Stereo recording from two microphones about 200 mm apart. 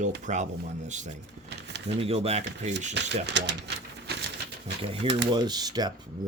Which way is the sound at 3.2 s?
60° right (ahead or behind).